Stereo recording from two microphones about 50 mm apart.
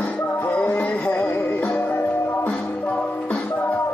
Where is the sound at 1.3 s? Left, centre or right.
Left.